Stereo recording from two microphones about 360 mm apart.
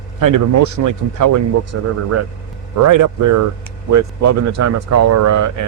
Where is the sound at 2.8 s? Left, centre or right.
Right.